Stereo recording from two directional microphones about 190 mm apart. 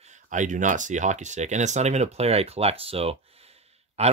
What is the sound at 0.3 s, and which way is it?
Speech, 40° right (ahead or behind).